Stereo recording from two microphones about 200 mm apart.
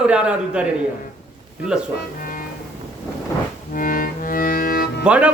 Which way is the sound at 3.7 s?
45° left (ahead or behind).